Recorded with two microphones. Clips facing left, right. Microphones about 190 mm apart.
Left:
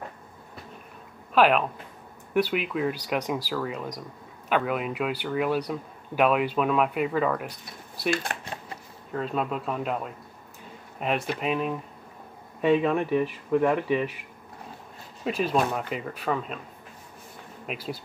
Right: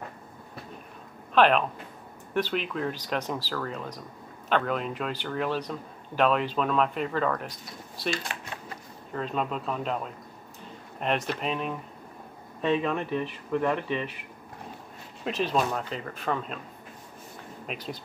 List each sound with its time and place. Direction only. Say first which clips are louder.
1.3 s a man's voice: left 1 dB; 5° left (ahead or behind)
8.1 s speech: left 4 dB; 55° left (ahead or behind)
9.1 s a man's voice: left 2 dB; 5° left (ahead or behind)
15.2 s a man's voice: left 2 dB; 5° left (ahead or behind)
17.6 s speech: left 3 dB; 5° left (ahead or behind)